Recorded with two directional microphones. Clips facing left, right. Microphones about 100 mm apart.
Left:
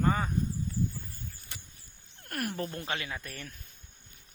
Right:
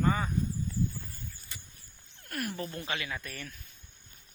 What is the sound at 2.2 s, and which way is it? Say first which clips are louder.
Speech: left 2 dB; 50° left (ahead or behind).